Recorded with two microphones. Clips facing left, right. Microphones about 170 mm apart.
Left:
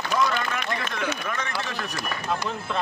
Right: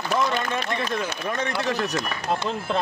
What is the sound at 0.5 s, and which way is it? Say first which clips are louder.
Speech: right 3 dB; 30° right (ahead or behind).